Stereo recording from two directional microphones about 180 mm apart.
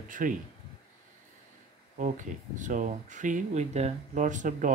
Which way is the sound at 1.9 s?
45° right (ahead or behind).